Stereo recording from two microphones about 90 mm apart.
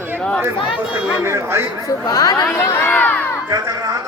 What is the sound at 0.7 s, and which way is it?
Speech, 10° right (ahead or behind).